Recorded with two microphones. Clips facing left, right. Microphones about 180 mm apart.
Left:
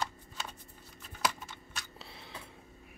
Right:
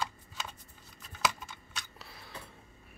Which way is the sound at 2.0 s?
25° left (ahead or behind).